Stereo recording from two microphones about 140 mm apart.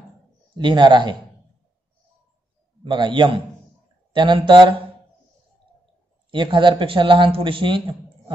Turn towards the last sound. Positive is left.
turn(degrees=-35)  # may be behind; listen again after turning